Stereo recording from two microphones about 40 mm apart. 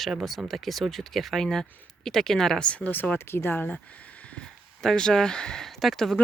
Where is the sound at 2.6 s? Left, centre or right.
Left.